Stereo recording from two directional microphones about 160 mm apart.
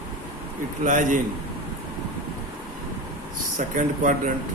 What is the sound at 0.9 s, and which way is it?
Speech, 55° right (ahead or behind).